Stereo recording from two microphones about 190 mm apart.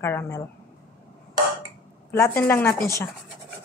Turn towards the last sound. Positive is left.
turn(degrees=15)  # may be behind; listen again after turning